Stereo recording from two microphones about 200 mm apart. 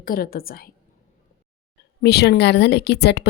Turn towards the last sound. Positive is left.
turn(degrees=55)  # may be behind; listen again after turning